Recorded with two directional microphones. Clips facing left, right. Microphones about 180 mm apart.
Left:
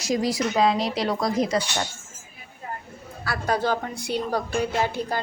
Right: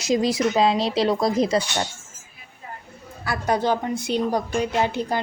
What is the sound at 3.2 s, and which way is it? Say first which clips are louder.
A woman's voice: right 2 dB; 20° right (ahead or behind).